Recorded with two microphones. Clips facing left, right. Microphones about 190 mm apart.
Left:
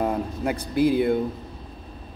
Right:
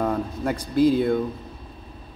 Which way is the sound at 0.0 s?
10° left (ahead or behind).